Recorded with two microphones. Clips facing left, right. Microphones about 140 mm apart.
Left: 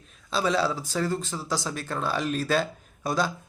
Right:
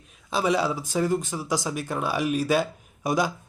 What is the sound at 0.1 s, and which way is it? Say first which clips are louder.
Speech: right 2 dB; 15° right (ahead or behind).